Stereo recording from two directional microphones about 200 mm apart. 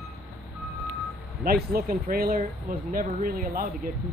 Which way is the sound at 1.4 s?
50° right (ahead or behind).